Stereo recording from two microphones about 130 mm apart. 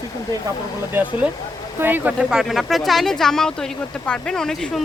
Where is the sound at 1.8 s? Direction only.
15° right (ahead or behind).